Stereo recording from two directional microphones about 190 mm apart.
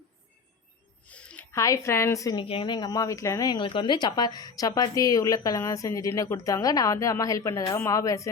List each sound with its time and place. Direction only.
1.0 s speech: 5° left (ahead or behind)